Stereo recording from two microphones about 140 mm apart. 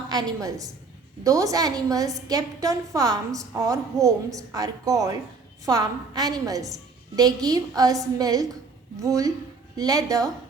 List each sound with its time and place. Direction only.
0.1 s a woman's voice: 25° right (ahead or behind)